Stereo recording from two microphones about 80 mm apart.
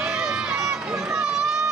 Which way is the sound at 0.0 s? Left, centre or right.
Centre.